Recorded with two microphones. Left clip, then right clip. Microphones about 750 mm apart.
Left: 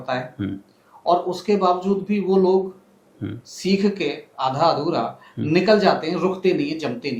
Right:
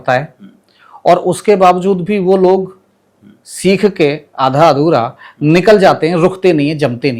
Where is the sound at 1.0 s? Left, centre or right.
Right.